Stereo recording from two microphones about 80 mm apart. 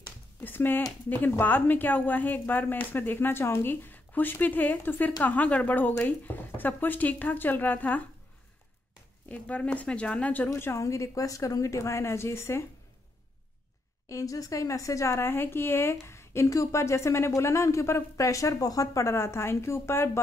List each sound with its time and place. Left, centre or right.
0.4 s speech: left
9.3 s speech: centre
10.5 s speech: left
14.0 s speech: left